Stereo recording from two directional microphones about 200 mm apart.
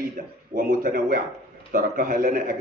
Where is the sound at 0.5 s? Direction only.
45° right (ahead or behind).